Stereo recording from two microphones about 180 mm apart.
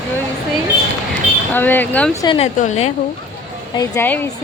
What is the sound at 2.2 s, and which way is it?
Speech, 25° left (ahead or behind).